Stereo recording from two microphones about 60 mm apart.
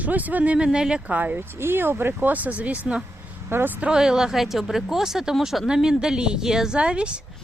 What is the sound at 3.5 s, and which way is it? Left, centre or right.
Speech, right.